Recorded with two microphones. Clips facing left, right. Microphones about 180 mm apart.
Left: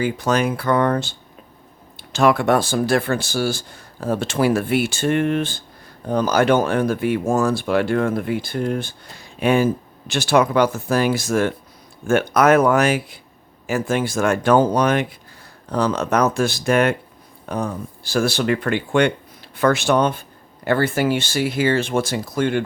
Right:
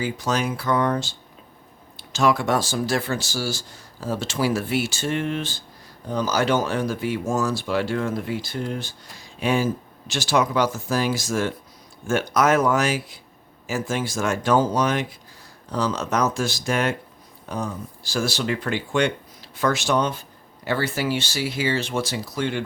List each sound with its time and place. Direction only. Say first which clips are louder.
0.0 s speech: left 5 dB; 60° left (ahead or behind)